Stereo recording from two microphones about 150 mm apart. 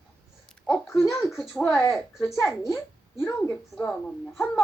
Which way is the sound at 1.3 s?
Centre (ahead or behind).